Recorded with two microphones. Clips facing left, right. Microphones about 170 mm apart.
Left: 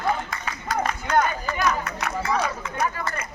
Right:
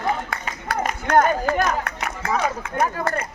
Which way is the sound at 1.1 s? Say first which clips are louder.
Right 7 dB; 55° right (ahead or behind).